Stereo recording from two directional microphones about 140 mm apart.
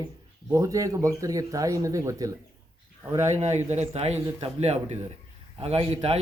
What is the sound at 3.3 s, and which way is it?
A man's voice, 55° right (ahead or behind).